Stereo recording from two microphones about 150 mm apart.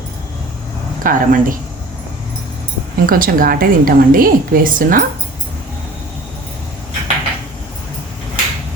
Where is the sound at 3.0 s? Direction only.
70° right (ahead or behind).